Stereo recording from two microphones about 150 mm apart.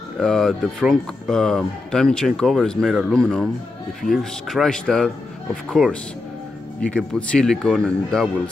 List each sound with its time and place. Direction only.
0.2 s speech: centre (ahead or behind)